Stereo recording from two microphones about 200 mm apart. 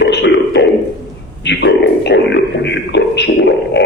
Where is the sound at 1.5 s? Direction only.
60° left (ahead or behind).